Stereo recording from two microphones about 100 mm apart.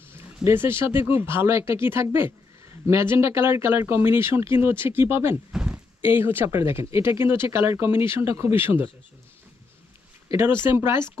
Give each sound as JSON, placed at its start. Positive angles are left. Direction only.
{"t": 0.4, "sound": "speech", "side_deg": -20}
{"t": 5.5, "sound": "a sound", "side_deg": -10}
{"t": 6.0, "sound": "speech", "side_deg": -20}
{"t": 10.4, "sound": "speech", "side_deg": -20}